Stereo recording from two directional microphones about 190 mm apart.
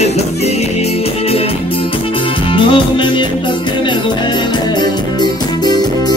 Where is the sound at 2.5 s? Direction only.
25° left (ahead or behind).